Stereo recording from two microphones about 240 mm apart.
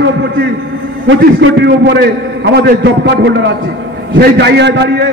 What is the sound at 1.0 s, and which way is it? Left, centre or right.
A man's voice, right.